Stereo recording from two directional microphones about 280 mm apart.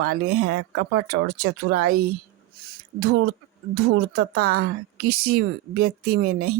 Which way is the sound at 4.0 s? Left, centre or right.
Right.